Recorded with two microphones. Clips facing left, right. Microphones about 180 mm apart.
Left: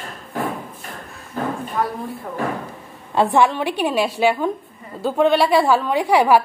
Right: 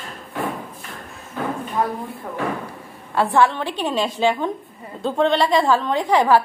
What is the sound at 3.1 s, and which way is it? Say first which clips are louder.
A woman's voice: left 1 dB; 20° left (ahead or behind).